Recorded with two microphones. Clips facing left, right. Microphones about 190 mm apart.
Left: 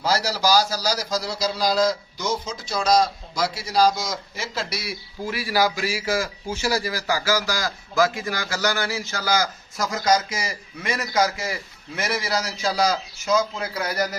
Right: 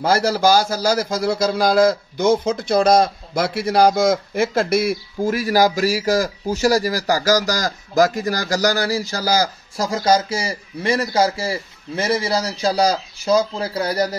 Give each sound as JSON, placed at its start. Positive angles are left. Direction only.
{"t": 0.0, "sound": "a man's voice", "side_deg": -55}